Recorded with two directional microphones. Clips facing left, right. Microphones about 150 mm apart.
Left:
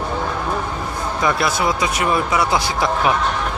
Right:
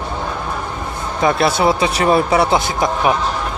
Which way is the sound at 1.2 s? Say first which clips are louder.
Right 5 dB; 25° right (ahead or behind).